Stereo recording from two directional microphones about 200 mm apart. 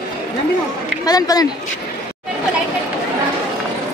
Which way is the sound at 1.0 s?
20° left (ahead or behind).